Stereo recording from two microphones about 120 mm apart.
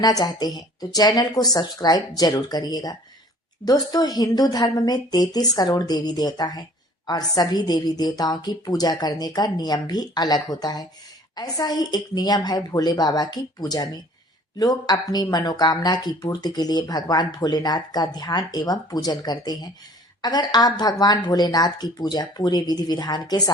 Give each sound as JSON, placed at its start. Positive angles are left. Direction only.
{"t": 0.0, "sound": "speech", "side_deg": 30}